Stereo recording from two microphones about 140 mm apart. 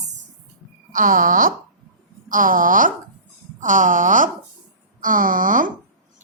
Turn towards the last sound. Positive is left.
turn(degrees=-70)  # may be behind; listen again after turning